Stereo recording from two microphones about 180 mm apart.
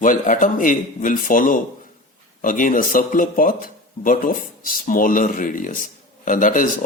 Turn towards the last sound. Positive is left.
turn(degrees=45)  # may be behind; listen again after turning